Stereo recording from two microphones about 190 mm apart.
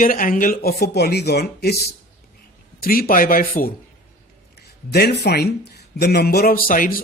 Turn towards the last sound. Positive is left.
turn(degrees=45)  # may be behind; listen again after turning